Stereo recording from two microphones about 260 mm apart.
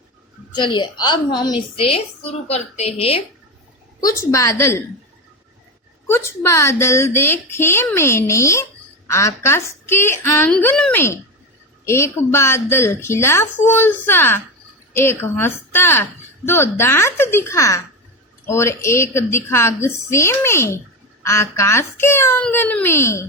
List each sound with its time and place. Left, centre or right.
0.5 s a woman's voice: centre
4.0 s a woman's voice: centre
6.1 s a woman's voice: centre